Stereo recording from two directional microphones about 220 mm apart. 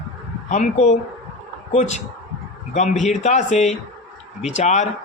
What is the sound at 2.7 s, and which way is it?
A man's voice, 35° left (ahead or behind).